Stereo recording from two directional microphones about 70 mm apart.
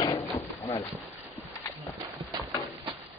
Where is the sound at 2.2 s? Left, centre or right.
Centre.